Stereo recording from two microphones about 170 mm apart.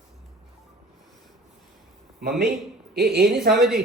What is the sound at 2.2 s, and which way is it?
A woman's voice, 75° right (ahead or behind).